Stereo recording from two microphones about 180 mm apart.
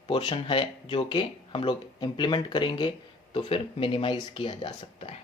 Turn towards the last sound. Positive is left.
turn(degrees=30)  # may be behind; listen again after turning